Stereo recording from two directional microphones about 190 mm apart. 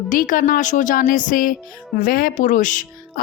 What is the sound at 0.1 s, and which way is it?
A woman's voice, 45° left (ahead or behind).